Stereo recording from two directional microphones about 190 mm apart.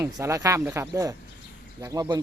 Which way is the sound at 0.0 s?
15° right (ahead or behind).